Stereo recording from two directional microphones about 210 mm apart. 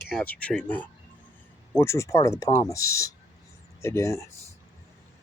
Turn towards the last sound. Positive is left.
turn(degrees=15)  # may be behind; listen again after turning